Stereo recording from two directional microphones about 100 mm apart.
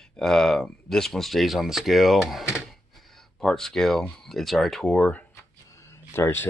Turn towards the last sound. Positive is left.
turn(degrees=25)  # may be behind; listen again after turning